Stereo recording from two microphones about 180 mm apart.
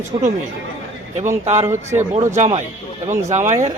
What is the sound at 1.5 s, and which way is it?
Speech, 35° right (ahead or behind).